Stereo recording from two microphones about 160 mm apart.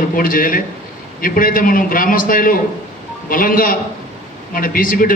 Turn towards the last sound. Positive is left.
turn(degrees=60)  # may be behind; listen again after turning